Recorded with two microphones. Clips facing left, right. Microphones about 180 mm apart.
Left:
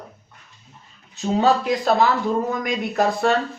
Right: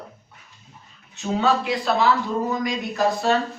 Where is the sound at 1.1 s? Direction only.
35° left (ahead or behind).